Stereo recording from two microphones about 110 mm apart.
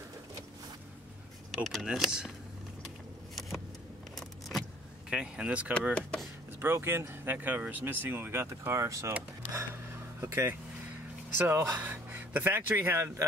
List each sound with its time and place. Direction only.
1.5 s speech: centre (ahead or behind)
3.3 s vehicle: centre (ahead or behind)
4.2 s keys jangling: centre (ahead or behind)
5.1 s speech: 5° right (ahead or behind); by 9.1 s 30° right (ahead or behind)
10.2 s speech: 20° right (ahead or behind)